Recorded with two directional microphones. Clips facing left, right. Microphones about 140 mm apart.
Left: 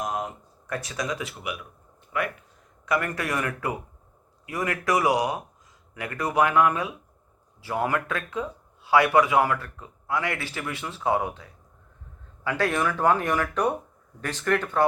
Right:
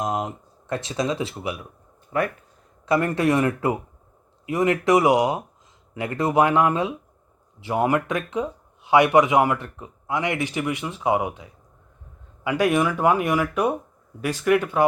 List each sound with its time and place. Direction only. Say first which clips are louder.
0.0 s speech: right 4 dB; 20° right (ahead or behind); by 2.3 s 35° right (ahead or behind)
2.8 s speech: right 7 dB; 25° right (ahead or behind)
12.5 s speech: right 5 dB; 15° right (ahead or behind)